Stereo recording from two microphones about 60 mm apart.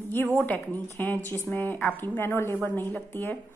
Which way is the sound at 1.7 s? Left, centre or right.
Left.